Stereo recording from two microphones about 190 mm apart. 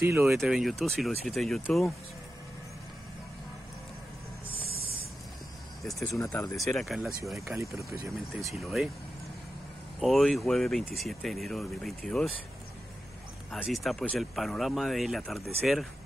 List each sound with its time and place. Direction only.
0.0 s speech: 10° right (ahead or behind)
0.3 s speech: centre (ahead or behind)
6.1 s speech: 15° left (ahead or behind)
6.5 s speech: centre (ahead or behind)
7.5 s speech: 15° right (ahead or behind)
8.5 s speech: centre (ahead or behind)
9.9 s speech: centre (ahead or behind)
13.5 s speech: centre (ahead or behind)